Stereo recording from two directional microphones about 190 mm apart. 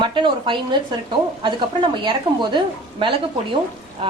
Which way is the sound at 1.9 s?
25° right (ahead or behind).